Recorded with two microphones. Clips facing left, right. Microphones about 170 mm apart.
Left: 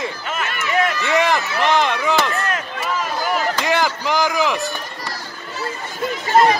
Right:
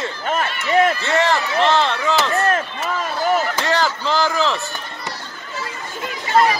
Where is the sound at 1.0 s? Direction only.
15° left (ahead or behind).